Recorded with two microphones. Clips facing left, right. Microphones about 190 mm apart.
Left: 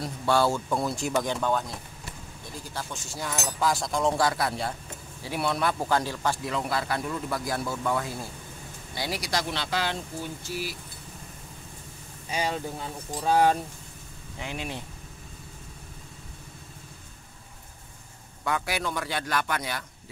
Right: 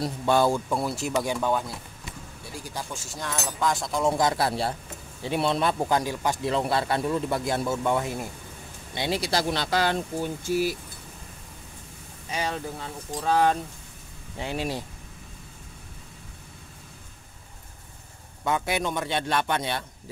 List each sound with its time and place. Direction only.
0.2 s speech: 15° right (ahead or behind)
0.7 s speech: 5° right (ahead or behind)
3.1 s speech: 5° left (ahead or behind)
4.2 s speech: 20° right (ahead or behind)
4.5 s speech: 30° right (ahead or behind); by 6.4 s 15° right (ahead or behind)
6.4 s speech: 30° right (ahead or behind); by 10.6 s 50° right (ahead or behind)
13.1 s speech: 10° left (ahead or behind)
14.4 s speech: 35° right (ahead or behind)
18.4 s speech: 20° right (ahead or behind)